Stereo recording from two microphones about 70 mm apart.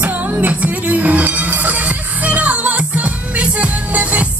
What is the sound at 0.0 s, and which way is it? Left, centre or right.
Music, right.